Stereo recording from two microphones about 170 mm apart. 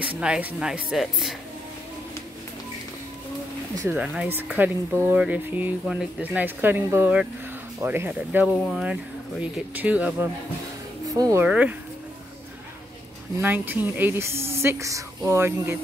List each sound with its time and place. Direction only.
0.2 s speech: 5° right (ahead or behind)
3.9 s speech: 5° right (ahead or behind)
11.1 s speech: 20° right (ahead or behind)
11.4 s speech: 10° right (ahead or behind)
13.4 s speech: 10° right (ahead or behind)